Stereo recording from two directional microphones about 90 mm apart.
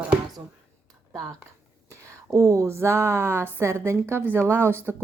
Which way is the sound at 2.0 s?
35° right (ahead or behind).